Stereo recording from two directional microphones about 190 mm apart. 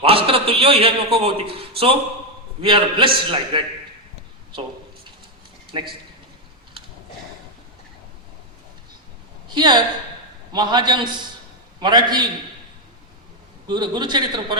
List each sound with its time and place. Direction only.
0.0 s a man's voice: 30° right (ahead or behind)
5.7 s a man's voice: 25° right (ahead or behind)
9.6 s a man's voice: 25° right (ahead or behind)
13.7 s a man's voice: 25° right (ahead or behind)